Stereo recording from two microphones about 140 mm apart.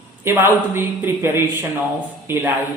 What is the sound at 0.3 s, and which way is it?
A woman's voice, 15° right (ahead or behind).